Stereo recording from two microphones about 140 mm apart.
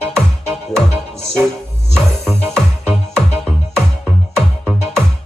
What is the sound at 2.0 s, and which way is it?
Music, centre (ahead or behind).